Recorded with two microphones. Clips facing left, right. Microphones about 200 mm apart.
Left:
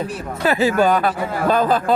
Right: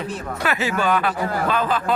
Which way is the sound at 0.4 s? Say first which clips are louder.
Left 6 dB; 35° left (ahead or behind).